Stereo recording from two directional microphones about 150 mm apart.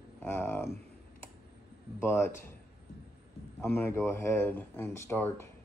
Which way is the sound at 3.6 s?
15° left (ahead or behind).